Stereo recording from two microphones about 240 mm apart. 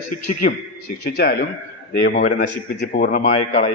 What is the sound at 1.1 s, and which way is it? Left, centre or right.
Speech, left.